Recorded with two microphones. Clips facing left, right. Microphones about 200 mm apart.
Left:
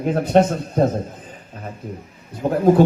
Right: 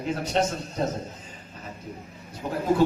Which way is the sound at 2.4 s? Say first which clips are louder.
Left 10 dB; 50° left (ahead or behind).